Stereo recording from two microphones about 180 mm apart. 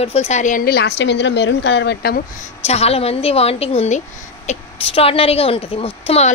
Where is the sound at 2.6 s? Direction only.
35° left (ahead or behind).